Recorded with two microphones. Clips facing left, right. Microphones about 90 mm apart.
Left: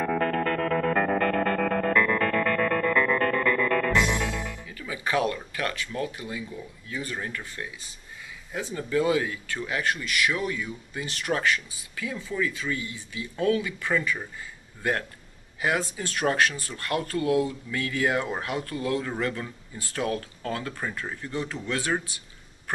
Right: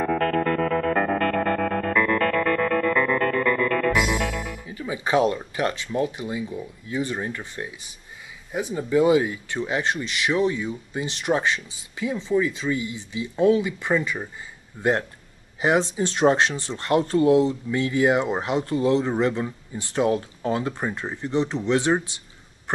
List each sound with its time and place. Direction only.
0.4 s music: 5° right (ahead or behind)
1.4 s music: 5° right (ahead or behind)
4.6 s speech: 20° right (ahead or behind)